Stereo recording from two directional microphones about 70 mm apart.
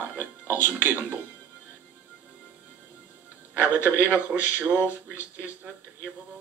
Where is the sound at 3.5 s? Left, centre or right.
Right.